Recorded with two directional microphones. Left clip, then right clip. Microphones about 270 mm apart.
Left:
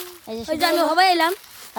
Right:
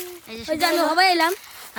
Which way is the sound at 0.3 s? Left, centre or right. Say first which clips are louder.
Left 4 dB; centre.